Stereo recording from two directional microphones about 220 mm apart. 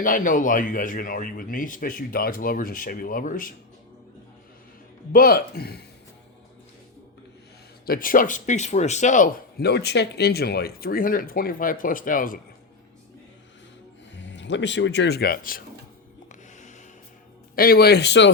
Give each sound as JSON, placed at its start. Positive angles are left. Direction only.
{"t": 0.0, "sound": "speech", "side_deg": 40}
{"t": 5.1, "sound": "speech", "side_deg": 40}
{"t": 7.9, "sound": "speech", "side_deg": 40}
{"t": 14.2, "sound": "speech", "side_deg": 55}
{"t": 16.3, "sound": "music", "side_deg": 35}
{"t": 17.5, "sound": "speech", "side_deg": 40}